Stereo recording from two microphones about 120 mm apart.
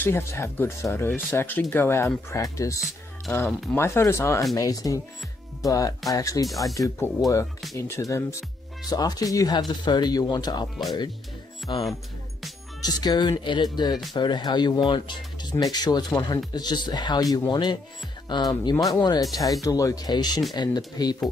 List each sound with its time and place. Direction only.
0.0 s speech: 20° left (ahead or behind)
3.3 s speech: 15° left (ahead or behind); by 21.2 s 35° left (ahead or behind)